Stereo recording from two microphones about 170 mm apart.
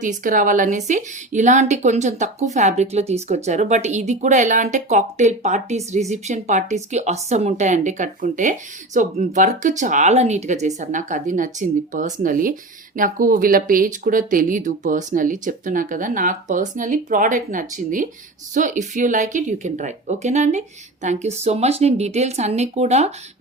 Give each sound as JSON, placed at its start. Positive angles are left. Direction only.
{"t": 0.0, "sound": "speech", "side_deg": -50}